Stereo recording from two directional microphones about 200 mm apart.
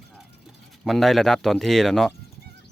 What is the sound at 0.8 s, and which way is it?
Speech, centre (ahead or behind).